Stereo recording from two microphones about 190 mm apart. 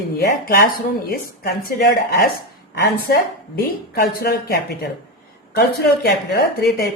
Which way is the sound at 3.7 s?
55° left (ahead or behind).